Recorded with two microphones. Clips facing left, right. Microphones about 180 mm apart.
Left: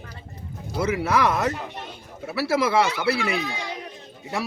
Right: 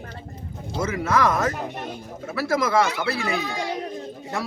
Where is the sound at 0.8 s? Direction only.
10° left (ahead or behind).